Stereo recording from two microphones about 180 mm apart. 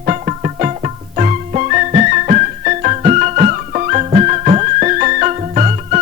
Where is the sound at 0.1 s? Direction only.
40° right (ahead or behind).